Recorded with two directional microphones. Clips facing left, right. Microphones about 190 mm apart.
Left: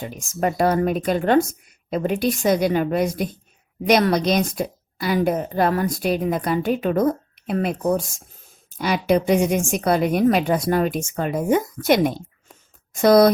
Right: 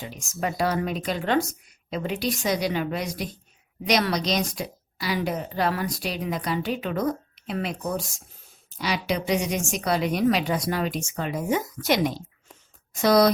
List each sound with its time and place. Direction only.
0.0 s a woman's voice: 50° left (ahead or behind)